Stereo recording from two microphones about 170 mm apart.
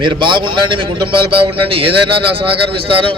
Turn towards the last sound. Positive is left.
turn(degrees=-30)  # may be behind; listen again after turning